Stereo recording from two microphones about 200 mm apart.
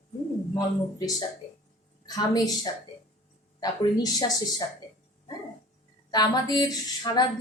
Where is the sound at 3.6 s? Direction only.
20° left (ahead or behind).